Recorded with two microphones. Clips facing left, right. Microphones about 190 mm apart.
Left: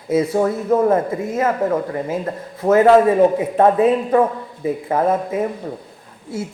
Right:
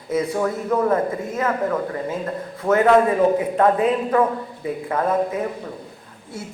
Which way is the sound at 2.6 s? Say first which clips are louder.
Left 4 dB; 30° left (ahead or behind).